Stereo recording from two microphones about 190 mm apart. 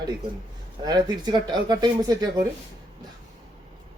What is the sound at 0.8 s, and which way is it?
A man's voice, 20° right (ahead or behind).